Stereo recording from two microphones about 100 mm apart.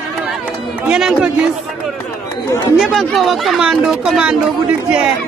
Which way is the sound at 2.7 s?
Centre (ahead or behind).